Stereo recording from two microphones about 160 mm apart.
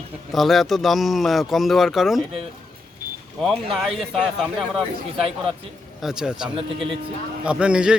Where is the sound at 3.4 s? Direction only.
Centre (ahead or behind).